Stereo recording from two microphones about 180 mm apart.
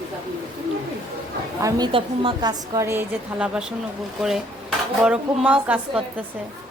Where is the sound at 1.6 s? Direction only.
25° right (ahead or behind); by 3.7 s 5° right (ahead or behind).